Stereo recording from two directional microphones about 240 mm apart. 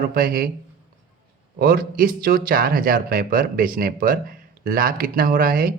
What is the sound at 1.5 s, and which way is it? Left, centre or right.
Speech, right.